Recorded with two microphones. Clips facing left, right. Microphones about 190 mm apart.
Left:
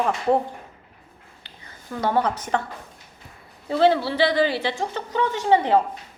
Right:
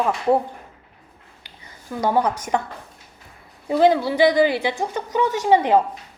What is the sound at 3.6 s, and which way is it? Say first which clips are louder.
A woman's voice: right 2 dB; 15° right (ahead or behind).